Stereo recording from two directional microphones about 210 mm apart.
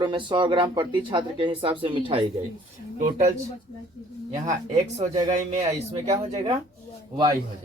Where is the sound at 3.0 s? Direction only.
35° right (ahead or behind).